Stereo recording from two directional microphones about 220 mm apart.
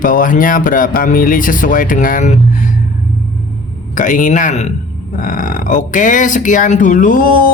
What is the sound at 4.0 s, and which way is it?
Speech, 35° left (ahead or behind).